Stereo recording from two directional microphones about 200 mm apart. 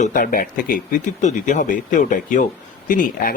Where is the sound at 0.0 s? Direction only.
45° left (ahead or behind).